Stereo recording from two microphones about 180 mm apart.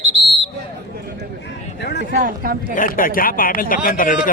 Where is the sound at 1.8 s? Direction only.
70° left (ahead or behind).